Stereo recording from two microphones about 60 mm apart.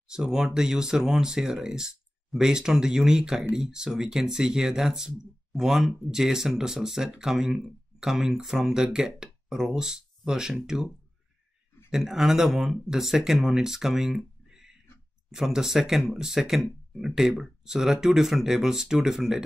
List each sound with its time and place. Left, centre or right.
0.1 s speech: centre
11.9 s speech: centre
15.3 s speech: centre